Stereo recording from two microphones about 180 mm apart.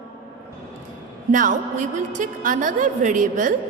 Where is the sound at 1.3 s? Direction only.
45° right (ahead or behind).